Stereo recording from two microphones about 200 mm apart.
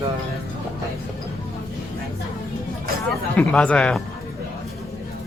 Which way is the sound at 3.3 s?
5° left (ahead or behind).